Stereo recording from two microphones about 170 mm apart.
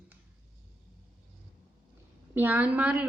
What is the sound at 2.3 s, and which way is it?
Speech, 10° right (ahead or behind).